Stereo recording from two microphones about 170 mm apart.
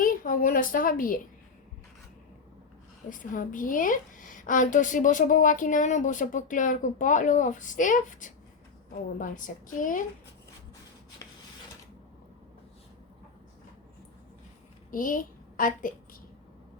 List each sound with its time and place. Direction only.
0.0 s a sound: 55° left (ahead or behind)
3.1 s a woman's voice: 50° left (ahead or behind)
14.8 s a woman's voice: 50° left (ahead or behind)